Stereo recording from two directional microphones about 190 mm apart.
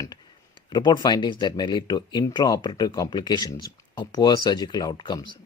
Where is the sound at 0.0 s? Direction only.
20° left (ahead or behind).